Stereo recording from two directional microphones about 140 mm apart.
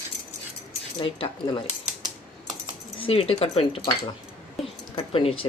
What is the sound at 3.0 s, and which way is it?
Speech, 45° left (ahead or behind).